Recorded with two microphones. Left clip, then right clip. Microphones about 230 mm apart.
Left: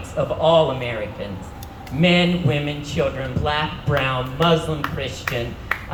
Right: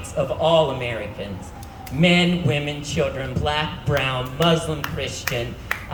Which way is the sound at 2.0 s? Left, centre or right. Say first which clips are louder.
Left 1 dB; right.